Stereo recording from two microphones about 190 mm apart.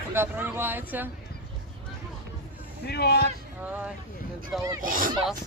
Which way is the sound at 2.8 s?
60° left (ahead or behind).